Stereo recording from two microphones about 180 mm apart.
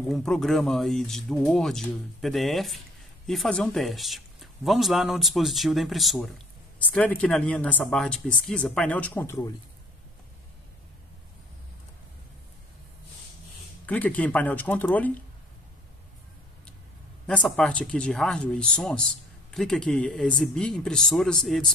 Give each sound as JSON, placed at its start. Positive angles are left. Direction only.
{"t": 0.1, "sound": "speech", "side_deg": 0}
{"t": 13.8, "sound": "speech", "side_deg": 10}
{"t": 17.3, "sound": "speech", "side_deg": 5}